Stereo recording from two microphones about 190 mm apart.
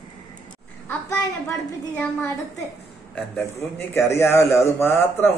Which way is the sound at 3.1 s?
10° left (ahead or behind).